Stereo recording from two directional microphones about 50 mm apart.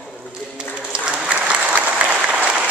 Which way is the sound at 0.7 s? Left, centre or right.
Right.